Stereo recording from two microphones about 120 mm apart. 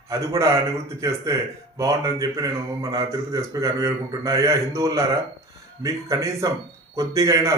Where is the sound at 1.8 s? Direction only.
30° right (ahead or behind).